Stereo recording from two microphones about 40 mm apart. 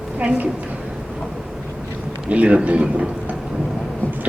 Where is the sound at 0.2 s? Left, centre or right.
Right.